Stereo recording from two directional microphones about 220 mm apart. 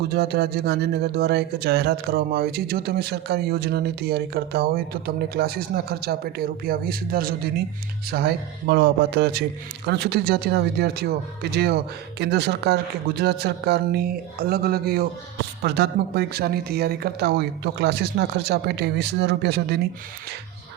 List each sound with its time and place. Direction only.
0.1 s speech: 45° right (ahead or behind)